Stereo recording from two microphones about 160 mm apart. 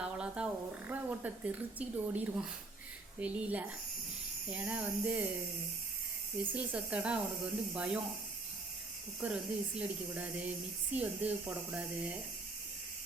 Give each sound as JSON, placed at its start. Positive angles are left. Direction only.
{"t": 0.0, "sound": "a sound", "side_deg": -5}
{"t": 3.2, "sound": "speech", "side_deg": -10}
{"t": 6.5, "sound": "speech", "side_deg": -10}
{"t": 9.2, "sound": "speech", "side_deg": -5}